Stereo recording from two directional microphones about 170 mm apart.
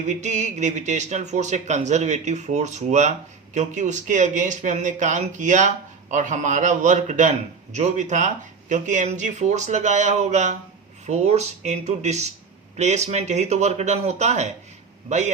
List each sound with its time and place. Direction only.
0.1 s speech: 45° right (ahead or behind)